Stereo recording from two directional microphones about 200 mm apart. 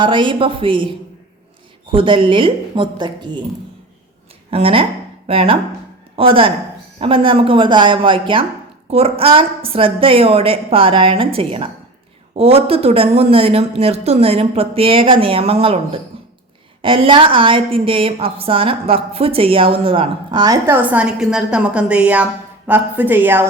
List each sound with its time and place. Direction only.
0.0 s a woman's voice: 25° right (ahead or behind)
4.5 s a woman's voice: 30° right (ahead or behind); by 23.5 s 10° right (ahead or behind)